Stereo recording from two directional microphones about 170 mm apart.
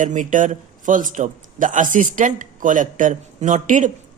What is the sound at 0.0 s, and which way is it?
A man's voice, 50° right (ahead or behind).